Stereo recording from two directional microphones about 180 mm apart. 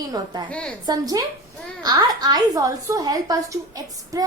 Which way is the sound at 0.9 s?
20° right (ahead or behind).